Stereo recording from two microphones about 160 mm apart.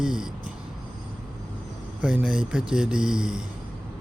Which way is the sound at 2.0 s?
5° right (ahead or behind).